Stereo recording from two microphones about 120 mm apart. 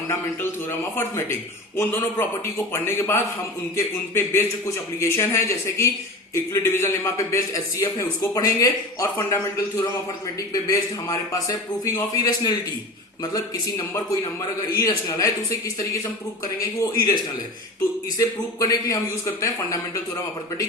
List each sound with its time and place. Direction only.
0.1 s a man's voice: 20° left (ahead or behind)
11.1 s a man's voice: 30° left (ahead or behind)
18.2 s a man's voice: 30° left (ahead or behind)